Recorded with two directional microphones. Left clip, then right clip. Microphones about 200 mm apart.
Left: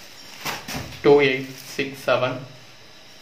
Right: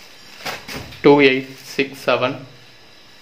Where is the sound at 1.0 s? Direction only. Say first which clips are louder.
Right 4 dB; 50° right (ahead or behind).